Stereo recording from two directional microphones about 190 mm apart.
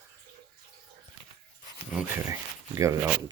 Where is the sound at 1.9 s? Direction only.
5° right (ahead or behind).